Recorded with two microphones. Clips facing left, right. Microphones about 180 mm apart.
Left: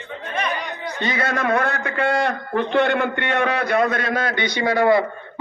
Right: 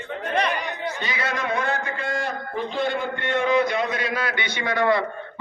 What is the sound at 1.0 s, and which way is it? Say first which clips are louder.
A man's voice: left 8 dB; 50° left (ahead or behind).